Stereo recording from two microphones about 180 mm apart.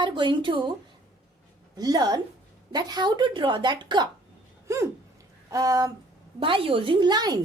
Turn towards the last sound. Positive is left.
turn(degrees=-20)  # may be behind; listen again after turning